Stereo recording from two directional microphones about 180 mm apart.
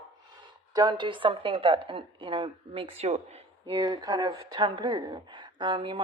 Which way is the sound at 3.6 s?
20° right (ahead or behind).